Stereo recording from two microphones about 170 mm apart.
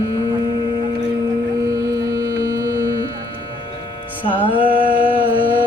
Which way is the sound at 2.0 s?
20° right (ahead or behind).